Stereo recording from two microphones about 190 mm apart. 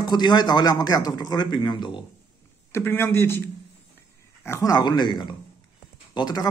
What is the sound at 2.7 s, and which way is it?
A man's voice, 10° left (ahead or behind).